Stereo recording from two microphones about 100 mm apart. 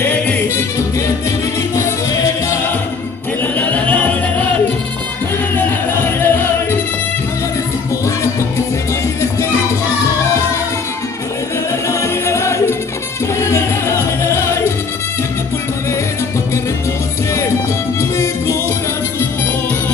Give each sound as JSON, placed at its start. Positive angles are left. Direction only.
{"t": 0.0, "sound": "music", "side_deg": 15}
{"t": 0.6, "sound": "music", "side_deg": 30}
{"t": 3.5, "sound": "music", "side_deg": 15}
{"t": 5.6, "sound": "music", "side_deg": 20}
{"t": 11.9, "sound": "music", "side_deg": 30}
{"t": 18.1, "sound": "music", "side_deg": 30}